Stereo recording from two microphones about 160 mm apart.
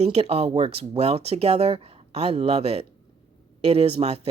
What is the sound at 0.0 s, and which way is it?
Speech, 40° right (ahead or behind).